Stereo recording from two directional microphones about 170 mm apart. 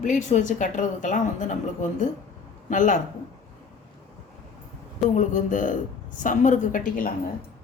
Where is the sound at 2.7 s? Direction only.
50° left (ahead or behind).